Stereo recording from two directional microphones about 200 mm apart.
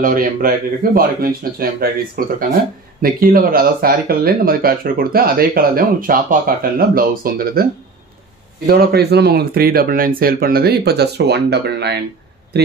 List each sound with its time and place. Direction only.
0.0 s speech: 45° right (ahead or behind)
8.6 s speech: 50° right (ahead or behind)